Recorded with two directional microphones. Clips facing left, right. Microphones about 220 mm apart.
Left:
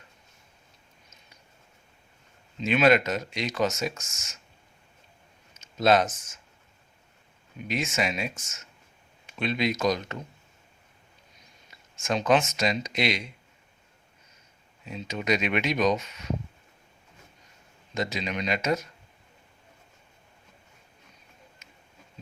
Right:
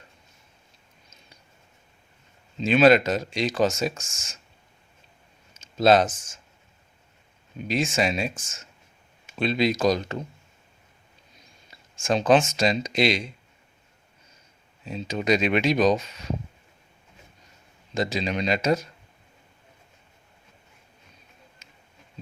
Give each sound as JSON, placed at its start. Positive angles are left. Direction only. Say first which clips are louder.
{"t": 2.6, "sound": "speech", "louder": "right 4 dB", "side_deg": -30}
{"t": 5.5, "sound": "speech", "louder": "right 3 dB", "side_deg": -30}
{"t": 7.7, "sound": "speech", "louder": "right 4 dB", "side_deg": -30}
{"t": 11.7, "sound": "speech", "louder": "right 4 dB", "side_deg": -30}
{"t": 14.8, "sound": "speech", "louder": "right 4 dB", "side_deg": -30}
{"t": 17.9, "sound": "speech", "louder": "right 4 dB", "side_deg": -30}
{"t": 21.6, "sound": "a sound", "louder": "even", "side_deg": -30}